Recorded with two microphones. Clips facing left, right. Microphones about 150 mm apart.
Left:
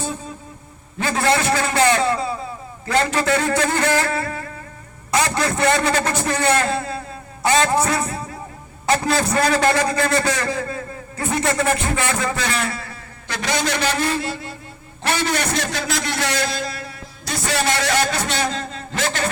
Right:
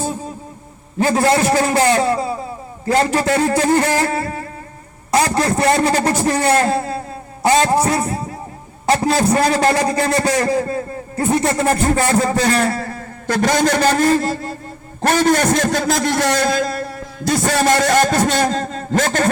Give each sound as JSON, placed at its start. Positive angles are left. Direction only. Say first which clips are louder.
{"t": 0.9, "sound": "a man's voice", "louder": "right 5 dB", "side_deg": -35}